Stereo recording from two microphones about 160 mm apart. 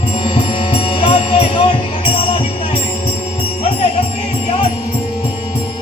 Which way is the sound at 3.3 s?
35° left (ahead or behind).